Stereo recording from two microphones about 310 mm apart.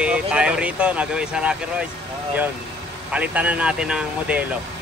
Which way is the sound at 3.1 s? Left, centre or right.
Centre.